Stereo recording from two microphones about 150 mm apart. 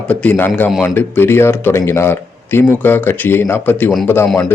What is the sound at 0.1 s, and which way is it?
Speech, 10° left (ahead or behind).